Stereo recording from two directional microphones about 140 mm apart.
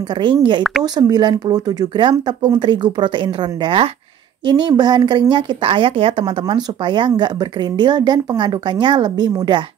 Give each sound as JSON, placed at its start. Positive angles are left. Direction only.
{"t": 0.1, "sound": "speech", "side_deg": -35}